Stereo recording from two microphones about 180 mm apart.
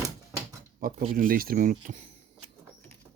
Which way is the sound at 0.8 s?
50° right (ahead or behind).